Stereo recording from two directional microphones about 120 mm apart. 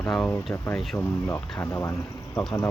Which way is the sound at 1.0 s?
15° left (ahead or behind).